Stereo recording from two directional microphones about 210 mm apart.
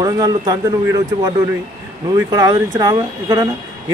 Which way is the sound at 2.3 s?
20° right (ahead or behind).